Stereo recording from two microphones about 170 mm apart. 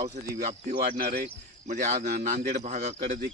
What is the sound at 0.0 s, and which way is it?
Speech, 40° right (ahead or behind).